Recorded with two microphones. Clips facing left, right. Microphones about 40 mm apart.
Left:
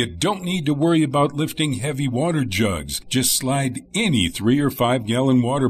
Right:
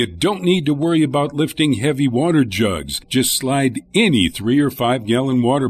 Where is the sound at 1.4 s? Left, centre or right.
Right; by 5.5 s centre.